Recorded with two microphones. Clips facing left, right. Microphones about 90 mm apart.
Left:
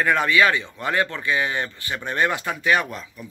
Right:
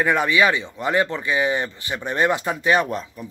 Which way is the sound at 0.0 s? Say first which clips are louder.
Even; 15° right (ahead or behind).